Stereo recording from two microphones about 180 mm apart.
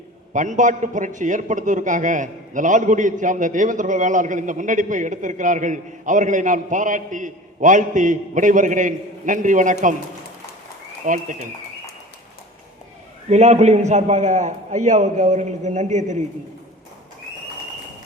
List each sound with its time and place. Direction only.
0.3 s a man's voice: 45° right (ahead or behind)
11.0 s a man's voice: 45° right (ahead or behind)
13.3 s a man's voice: 40° right (ahead or behind)